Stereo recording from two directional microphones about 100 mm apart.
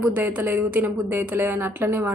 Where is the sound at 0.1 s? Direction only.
15° right (ahead or behind).